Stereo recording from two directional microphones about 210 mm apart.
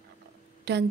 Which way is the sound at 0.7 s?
55° right (ahead or behind).